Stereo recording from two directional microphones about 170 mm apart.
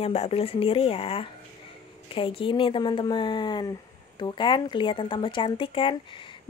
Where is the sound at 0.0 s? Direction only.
35° left (ahead or behind).